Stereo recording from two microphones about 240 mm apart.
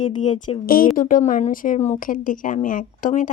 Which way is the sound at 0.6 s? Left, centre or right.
Left.